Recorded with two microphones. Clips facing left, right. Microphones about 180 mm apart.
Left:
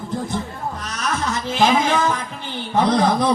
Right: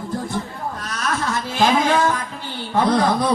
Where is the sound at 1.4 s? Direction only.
20° left (ahead or behind).